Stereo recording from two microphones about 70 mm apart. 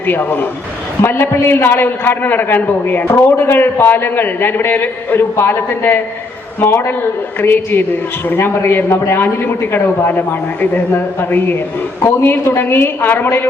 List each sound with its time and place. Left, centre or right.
0.1 s a man's voice: left